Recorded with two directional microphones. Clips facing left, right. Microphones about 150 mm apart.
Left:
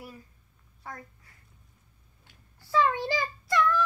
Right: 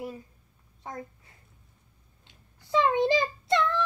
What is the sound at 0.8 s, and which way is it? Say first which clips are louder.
Speech: right 4 dB; 20° right (ahead or behind).